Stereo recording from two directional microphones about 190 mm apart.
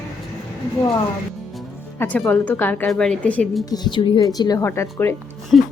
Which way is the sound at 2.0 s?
5° left (ahead or behind).